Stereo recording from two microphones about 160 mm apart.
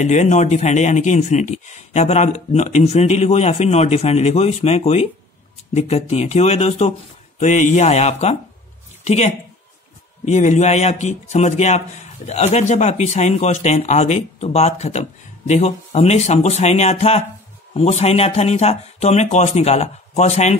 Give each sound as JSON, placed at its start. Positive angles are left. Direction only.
{"t": 0.0, "sound": "a man's voice", "side_deg": 45}